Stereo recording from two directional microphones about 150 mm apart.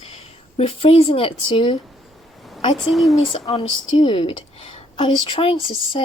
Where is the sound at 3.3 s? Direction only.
40° left (ahead or behind).